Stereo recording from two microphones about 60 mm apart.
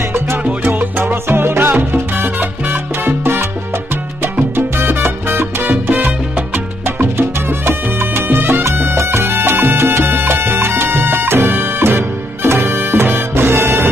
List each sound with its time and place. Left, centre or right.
1.0 s salsa music: right
4.6 s salsa music: right